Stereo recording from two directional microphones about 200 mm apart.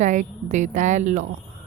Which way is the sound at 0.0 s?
40° right (ahead or behind).